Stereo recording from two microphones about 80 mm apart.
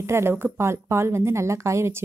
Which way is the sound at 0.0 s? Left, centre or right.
Right.